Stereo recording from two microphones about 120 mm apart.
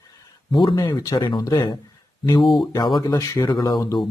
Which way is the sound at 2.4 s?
Centre (ahead or behind).